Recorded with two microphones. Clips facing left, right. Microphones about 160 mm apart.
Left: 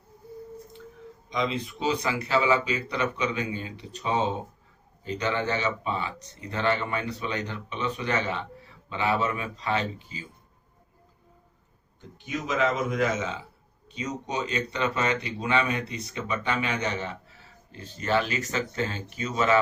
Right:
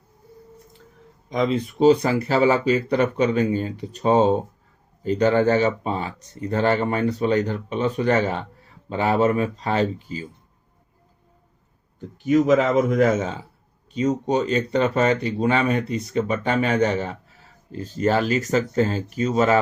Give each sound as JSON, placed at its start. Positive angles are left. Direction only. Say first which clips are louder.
{"t": 1.3, "sound": "speech", "louder": "right 7 dB", "side_deg": -50}
{"t": 12.2, "sound": "speech", "louder": "right 10 dB", "side_deg": -55}